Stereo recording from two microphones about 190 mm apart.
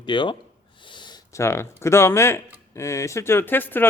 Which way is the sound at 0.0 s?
25° left (ahead or behind).